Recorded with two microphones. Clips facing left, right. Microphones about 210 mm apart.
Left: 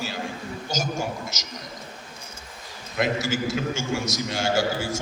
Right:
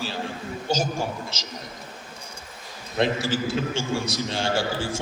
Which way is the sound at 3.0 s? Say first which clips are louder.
Right 1 dB; 30° right (ahead or behind).